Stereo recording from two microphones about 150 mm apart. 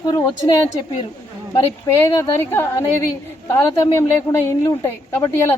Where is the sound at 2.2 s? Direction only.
15° left (ahead or behind).